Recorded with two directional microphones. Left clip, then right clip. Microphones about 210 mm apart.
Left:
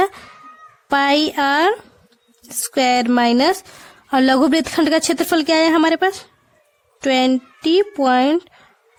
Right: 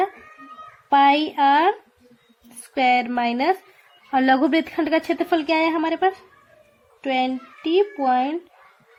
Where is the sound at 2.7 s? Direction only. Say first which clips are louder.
Left 3 dB; 45° left (ahead or behind).